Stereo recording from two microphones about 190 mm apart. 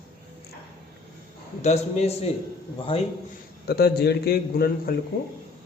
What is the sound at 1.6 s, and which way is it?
Speech, 35° left (ahead or behind).